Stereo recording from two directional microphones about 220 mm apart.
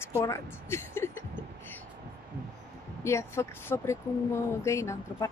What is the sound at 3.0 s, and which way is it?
A woman's voice, 10° left (ahead or behind).